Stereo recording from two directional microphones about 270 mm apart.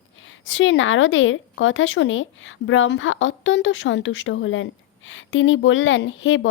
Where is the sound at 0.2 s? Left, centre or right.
Left.